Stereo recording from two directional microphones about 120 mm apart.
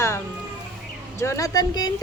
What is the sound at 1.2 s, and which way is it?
Speech, 25° left (ahead or behind).